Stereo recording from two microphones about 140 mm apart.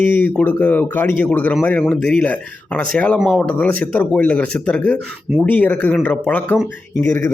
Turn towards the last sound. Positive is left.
turn(degrees=15)  # may be behind; listen again after turning